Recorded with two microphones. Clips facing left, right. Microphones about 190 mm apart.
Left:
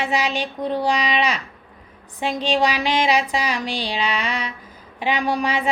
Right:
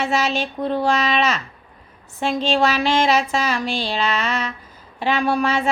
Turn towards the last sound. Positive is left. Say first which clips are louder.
# right 2 dB
turn(degrees=15)  # may be behind; listen again after turning